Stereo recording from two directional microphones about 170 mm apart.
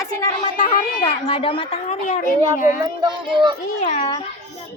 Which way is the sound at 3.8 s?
45° left (ahead or behind).